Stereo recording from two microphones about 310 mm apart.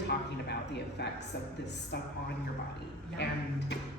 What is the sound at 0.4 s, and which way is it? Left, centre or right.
Speech, left.